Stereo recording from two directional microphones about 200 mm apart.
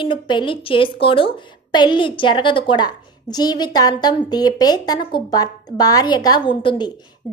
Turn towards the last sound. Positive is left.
turn(degrees=25)  # may be behind; listen again after turning